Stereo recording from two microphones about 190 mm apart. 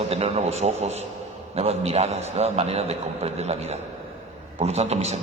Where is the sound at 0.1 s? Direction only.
30° right (ahead or behind).